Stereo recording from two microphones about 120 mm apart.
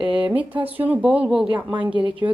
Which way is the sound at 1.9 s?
40° right (ahead or behind).